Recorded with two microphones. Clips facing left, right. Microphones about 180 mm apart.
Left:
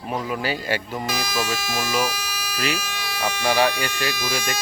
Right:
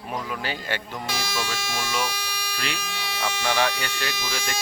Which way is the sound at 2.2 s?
30° right (ahead or behind).